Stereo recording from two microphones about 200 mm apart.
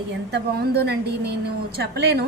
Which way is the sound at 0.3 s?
55° right (ahead or behind).